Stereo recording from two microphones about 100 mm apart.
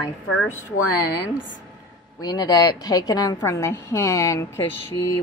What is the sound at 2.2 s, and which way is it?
A woman's voice, 40° left (ahead or behind).